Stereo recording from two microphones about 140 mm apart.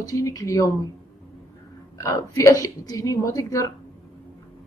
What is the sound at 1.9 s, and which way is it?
Speech, 25° left (ahead or behind).